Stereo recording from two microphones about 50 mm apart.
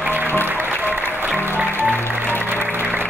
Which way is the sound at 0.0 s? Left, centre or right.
Right.